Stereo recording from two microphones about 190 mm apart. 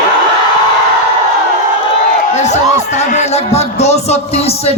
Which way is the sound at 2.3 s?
35° left (ahead or behind).